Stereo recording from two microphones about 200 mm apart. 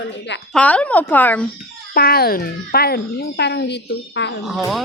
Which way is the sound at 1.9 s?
50° left (ahead or behind).